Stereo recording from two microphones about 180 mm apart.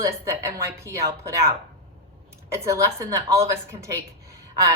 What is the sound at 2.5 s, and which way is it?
A woman's voice, 15° right (ahead or behind).